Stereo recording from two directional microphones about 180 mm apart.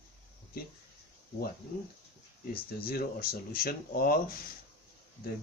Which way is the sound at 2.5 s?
55° left (ahead or behind).